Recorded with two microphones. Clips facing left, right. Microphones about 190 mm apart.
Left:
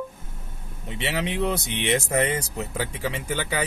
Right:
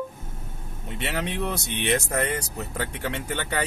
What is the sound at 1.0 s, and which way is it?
Speech, 15° left (ahead or behind).